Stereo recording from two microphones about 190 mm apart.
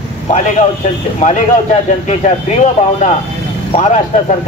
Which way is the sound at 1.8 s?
40° left (ahead or behind).